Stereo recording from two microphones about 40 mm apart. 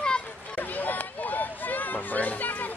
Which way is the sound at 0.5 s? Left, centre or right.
Left.